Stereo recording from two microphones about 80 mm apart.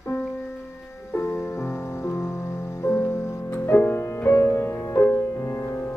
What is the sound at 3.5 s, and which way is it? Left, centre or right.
Music, left.